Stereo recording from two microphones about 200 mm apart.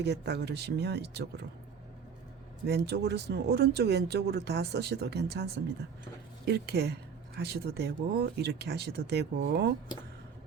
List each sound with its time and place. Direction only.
0.0 s speech: 55° right (ahead or behind)
2.6 s speech: 55° right (ahead or behind)